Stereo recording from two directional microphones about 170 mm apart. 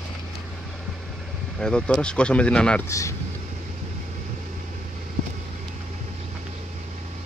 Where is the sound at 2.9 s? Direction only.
20° left (ahead or behind).